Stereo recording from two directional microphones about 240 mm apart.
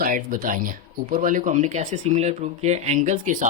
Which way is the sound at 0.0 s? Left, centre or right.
Right.